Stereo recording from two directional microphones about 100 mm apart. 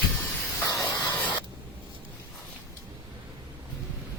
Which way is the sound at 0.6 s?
35° left (ahead or behind).